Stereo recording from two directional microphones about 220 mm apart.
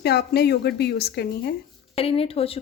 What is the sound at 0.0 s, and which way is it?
Speech, 45° left (ahead or behind).